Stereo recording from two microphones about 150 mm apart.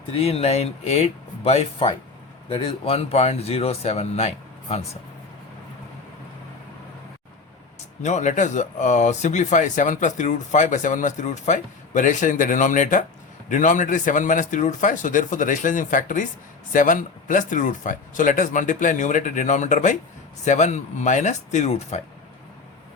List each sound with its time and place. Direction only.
0.1 s speech: 40° left (ahead or behind)
8.0 s speech: 50° left (ahead or behind)